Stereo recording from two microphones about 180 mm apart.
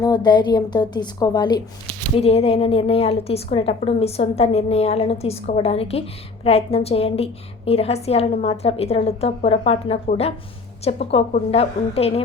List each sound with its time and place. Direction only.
0.0 s a woman's voice: 25° left (ahead or behind)
2.1 s a woman's voice: 35° left (ahead or behind)